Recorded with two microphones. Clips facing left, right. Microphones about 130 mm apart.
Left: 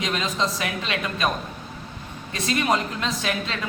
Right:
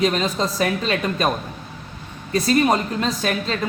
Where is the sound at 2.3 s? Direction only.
40° right (ahead or behind).